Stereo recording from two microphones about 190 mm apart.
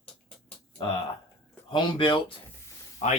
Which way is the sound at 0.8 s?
25° left (ahead or behind).